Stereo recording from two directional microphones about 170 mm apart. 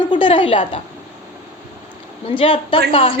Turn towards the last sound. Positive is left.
turn(degrees=30)  # may be behind; listen again after turning